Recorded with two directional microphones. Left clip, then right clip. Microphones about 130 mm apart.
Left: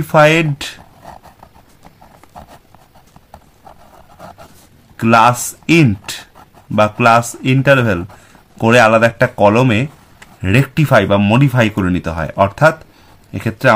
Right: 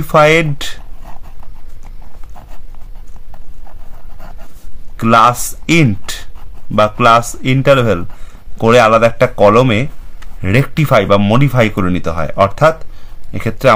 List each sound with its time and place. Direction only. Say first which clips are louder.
0.0 s speech: right 1 dB; 20° right (ahead or behind)
4.9 s a man's voice: right 1 dB; 20° right (ahead or behind)